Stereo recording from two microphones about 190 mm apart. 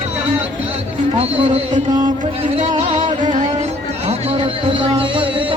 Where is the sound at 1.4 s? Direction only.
30° right (ahead or behind).